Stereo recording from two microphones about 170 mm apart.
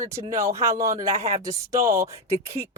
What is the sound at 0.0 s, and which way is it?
Speech, 15° right (ahead or behind).